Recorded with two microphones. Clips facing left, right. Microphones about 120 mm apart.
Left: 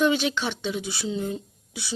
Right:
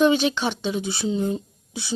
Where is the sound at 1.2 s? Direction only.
30° right (ahead or behind).